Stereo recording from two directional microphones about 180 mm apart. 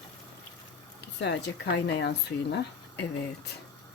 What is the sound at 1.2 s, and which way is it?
Speech, 70° left (ahead or behind).